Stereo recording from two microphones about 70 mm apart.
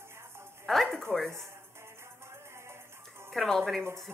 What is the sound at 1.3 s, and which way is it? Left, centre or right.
Music, right.